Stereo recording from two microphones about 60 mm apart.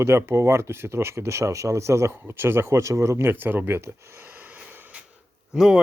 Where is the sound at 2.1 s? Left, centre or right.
Right.